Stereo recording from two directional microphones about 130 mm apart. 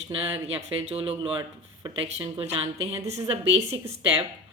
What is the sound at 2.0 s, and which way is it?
Speech, 55° right (ahead or behind).